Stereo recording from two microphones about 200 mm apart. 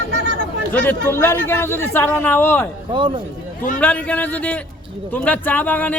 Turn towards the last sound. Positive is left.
turn(degrees=10)  # may be behind; listen again after turning